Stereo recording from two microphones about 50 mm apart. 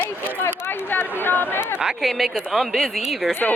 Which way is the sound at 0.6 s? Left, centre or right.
Left.